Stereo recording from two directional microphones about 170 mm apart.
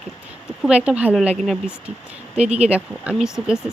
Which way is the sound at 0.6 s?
5° right (ahead or behind).